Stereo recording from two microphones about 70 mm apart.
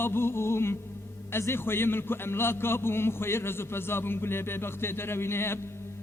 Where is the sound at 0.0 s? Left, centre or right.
Left.